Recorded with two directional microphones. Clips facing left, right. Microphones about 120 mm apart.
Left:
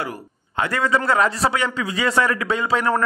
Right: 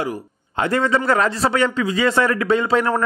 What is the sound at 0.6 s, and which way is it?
Speech, 25° right (ahead or behind).